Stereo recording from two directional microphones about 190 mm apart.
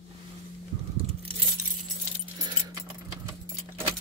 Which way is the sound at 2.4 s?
20° right (ahead or behind).